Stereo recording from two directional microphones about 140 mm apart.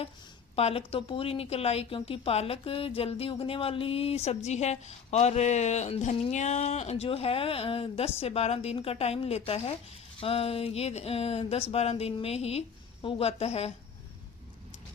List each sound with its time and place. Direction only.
0.5 s a woman's voice: 45° left (ahead or behind)